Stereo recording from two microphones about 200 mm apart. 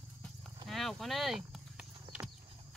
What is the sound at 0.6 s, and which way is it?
Horse, centre (ahead or behind).